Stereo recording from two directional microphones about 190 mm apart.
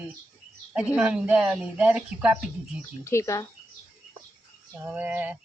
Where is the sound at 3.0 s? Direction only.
15° left (ahead or behind).